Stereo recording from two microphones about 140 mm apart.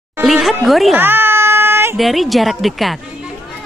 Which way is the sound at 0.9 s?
15° right (ahead or behind).